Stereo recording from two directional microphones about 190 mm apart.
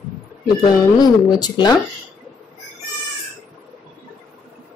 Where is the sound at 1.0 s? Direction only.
20° left (ahead or behind).